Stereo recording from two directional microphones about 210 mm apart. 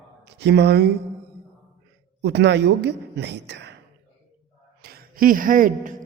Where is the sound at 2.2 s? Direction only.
55° right (ahead or behind).